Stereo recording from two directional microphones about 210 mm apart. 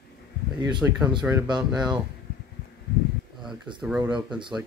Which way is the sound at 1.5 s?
5° right (ahead or behind).